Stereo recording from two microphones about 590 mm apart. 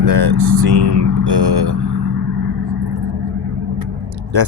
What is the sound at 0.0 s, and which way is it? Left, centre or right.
Vehicle, right.